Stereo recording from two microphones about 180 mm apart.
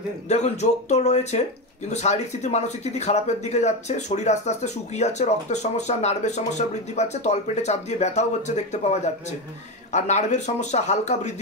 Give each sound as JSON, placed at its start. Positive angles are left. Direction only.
{"t": 0.3, "sound": "speech", "side_deg": 40}